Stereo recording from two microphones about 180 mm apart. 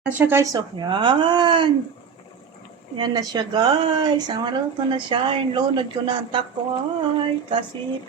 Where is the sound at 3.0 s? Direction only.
20° right (ahead or behind).